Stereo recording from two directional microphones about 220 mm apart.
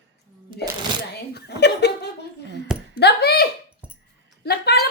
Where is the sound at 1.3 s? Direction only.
50° left (ahead or behind).